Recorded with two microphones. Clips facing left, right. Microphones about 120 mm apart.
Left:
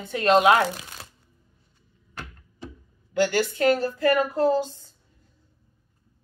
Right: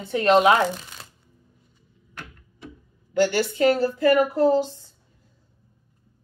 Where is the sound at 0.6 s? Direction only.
5° left (ahead or behind).